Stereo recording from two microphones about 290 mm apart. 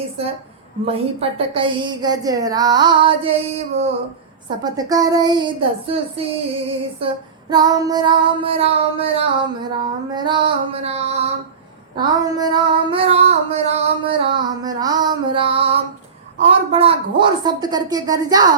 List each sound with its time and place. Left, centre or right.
0.9 s female singing: centre
7.5 s female singing: centre
10.2 s music: centre
11.9 s female singing: centre